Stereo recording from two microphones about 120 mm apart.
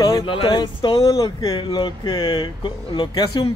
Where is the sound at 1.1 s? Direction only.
30° left (ahead or behind).